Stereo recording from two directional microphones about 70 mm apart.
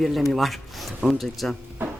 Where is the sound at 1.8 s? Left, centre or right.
Right.